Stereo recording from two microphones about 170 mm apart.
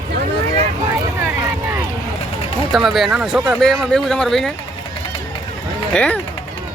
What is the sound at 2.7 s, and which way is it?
Speech, centre (ahead or behind).